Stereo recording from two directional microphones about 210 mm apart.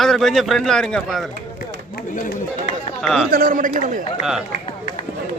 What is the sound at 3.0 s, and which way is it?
Speech, centre (ahead or behind).